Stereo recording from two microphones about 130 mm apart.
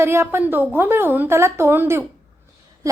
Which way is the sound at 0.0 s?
20° right (ahead or behind).